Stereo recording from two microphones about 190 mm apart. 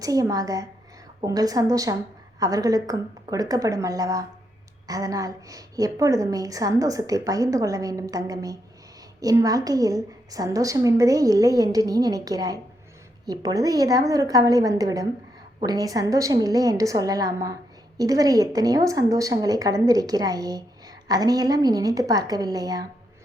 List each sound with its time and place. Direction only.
0.0 s a woman's voice: 20° right (ahead or behind)